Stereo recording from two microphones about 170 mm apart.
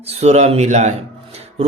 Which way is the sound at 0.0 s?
40° right (ahead or behind).